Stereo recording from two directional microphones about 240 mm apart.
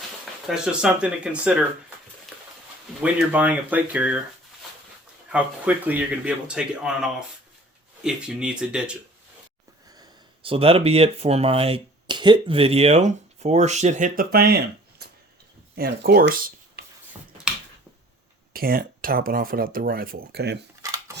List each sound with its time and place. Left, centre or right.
0.4 s speech: centre
3.0 s speech: centre
5.3 s speech: centre
9.9 s speech: centre; by 16.3 s right
16.8 s a sound: right
18.5 s speech: right